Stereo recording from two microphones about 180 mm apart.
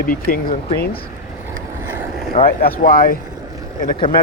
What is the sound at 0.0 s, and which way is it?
Speech, 55° left (ahead or behind).